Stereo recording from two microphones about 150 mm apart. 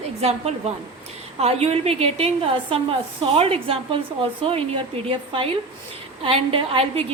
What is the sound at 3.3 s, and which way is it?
A woman's voice, 40° right (ahead or behind).